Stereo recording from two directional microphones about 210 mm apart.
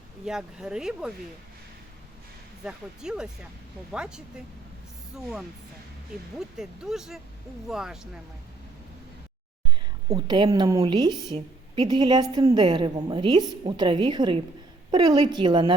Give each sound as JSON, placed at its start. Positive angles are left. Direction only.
{"t": 0.3, "sound": "speech", "side_deg": -5}
{"t": 2.6, "sound": "speech", "side_deg": -5}
{"t": 6.6, "sound": "speech", "side_deg": 0}
{"t": 10.1, "sound": "a woman's voice", "side_deg": -25}